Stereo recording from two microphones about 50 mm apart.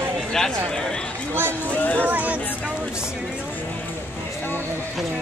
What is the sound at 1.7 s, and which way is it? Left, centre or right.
Speech, left.